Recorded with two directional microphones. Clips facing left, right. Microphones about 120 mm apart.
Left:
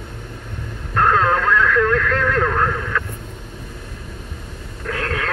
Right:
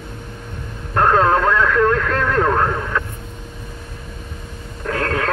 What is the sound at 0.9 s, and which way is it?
Radio, 30° right (ahead or behind).